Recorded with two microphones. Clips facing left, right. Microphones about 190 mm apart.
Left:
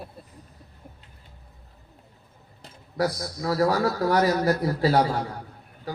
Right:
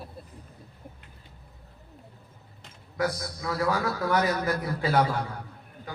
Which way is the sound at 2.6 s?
35° left (ahead or behind).